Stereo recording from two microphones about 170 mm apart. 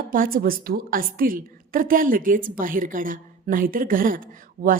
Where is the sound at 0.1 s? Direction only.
55° right (ahead or behind).